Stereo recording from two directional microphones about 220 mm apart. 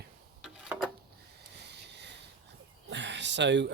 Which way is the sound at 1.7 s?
50° right (ahead or behind).